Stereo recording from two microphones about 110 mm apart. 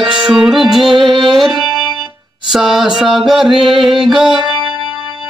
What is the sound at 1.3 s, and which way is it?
Music, centre (ahead or behind).